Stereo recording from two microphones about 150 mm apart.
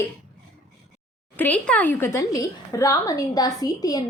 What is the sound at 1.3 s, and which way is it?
A woman's voice, 10° left (ahead or behind).